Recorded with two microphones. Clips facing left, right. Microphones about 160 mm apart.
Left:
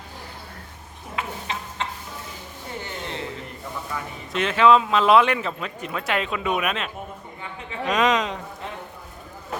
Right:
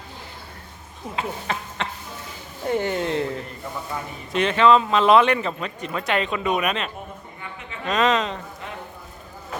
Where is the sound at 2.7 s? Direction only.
65° right (ahead or behind).